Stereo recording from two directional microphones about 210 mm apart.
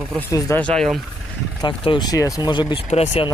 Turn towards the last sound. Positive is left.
turn(degrees=30)  # may be behind; listen again after turning